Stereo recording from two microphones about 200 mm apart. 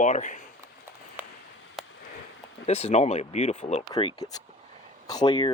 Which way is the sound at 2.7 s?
30° left (ahead or behind).